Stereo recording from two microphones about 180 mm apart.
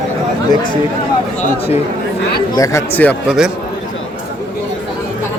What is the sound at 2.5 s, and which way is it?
Speech, 15° left (ahead or behind).